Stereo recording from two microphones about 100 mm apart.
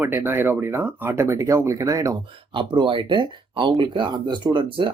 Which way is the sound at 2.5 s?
55° right (ahead or behind).